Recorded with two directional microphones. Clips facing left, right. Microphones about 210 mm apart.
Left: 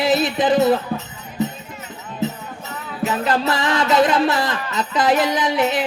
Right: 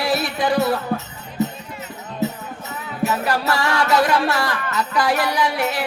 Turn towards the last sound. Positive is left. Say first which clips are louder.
# left 2 dB
turn(degrees=20)  # may be behind; listen again after turning